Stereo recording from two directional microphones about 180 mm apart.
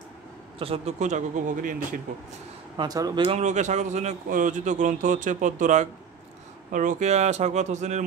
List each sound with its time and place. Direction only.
0.6 s speech: 35° right (ahead or behind)
2.8 s speech: 20° right (ahead or behind); by 8.0 s 40° right (ahead or behind)